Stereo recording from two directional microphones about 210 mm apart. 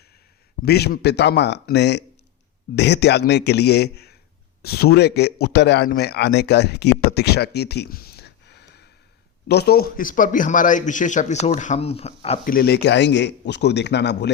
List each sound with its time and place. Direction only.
0.6 s a man's voice: 50° left (ahead or behind); by 12.4 s 30° left (ahead or behind)
12.5 s a man's voice: 45° left (ahead or behind)